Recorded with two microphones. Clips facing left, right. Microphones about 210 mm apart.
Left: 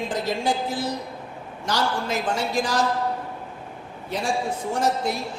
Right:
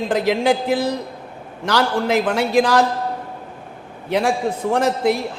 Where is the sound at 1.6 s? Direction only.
65° right (ahead or behind).